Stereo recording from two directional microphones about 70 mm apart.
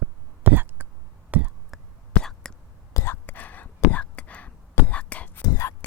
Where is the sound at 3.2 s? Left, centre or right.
Left.